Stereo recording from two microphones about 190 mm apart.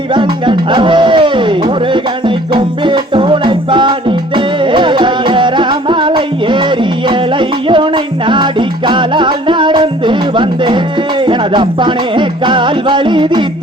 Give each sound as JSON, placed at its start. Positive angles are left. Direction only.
{"t": 0.1, "sound": "music", "side_deg": -25}